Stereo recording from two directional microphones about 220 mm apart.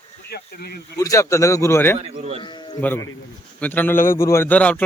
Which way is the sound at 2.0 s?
30° right (ahead or behind).